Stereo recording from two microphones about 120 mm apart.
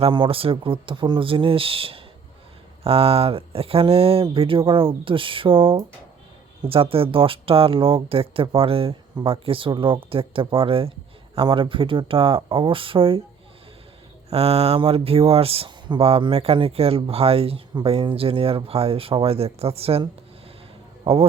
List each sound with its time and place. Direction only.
0.1 s speech: 45° right (ahead or behind)
14.3 s speech: 55° right (ahead or behind)